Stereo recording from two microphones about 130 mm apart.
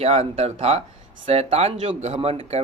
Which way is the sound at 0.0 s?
50° right (ahead or behind).